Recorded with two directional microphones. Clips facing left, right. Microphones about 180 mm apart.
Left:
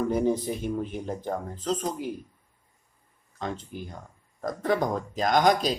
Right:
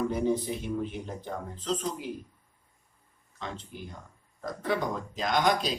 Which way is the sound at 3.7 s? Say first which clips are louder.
Left 4 dB; 45° left (ahead or behind).